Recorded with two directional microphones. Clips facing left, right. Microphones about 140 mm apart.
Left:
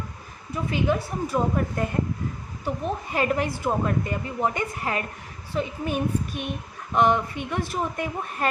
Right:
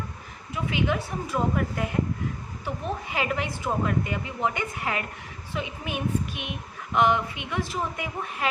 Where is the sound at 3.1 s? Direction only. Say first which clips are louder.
Left 5 dB; 45° left (ahead or behind).